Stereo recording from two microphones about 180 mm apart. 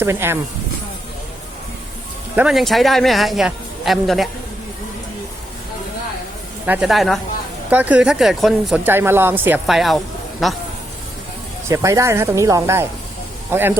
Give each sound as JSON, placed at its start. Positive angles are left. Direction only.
{"t": 0.0, "sound": "speech", "side_deg": -15}
{"t": 2.3, "sound": "speech", "side_deg": -5}
{"t": 6.7, "sound": "speech", "side_deg": -5}
{"t": 11.7, "sound": "speech", "side_deg": -20}